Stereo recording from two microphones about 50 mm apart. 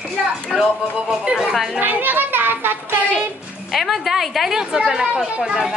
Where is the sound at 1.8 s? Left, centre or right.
Right.